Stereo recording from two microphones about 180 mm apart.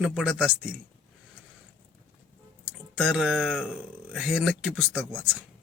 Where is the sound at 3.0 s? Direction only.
5° right (ahead or behind).